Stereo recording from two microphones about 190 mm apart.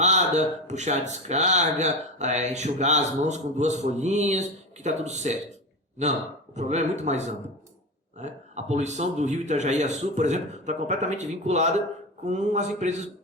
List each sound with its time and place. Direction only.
0.0 s speech: 40° right (ahead or behind)